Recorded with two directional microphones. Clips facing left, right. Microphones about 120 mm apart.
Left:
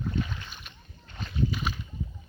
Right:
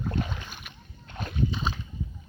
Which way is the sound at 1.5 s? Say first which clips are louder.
Right 1 dB; 25° right (ahead or behind).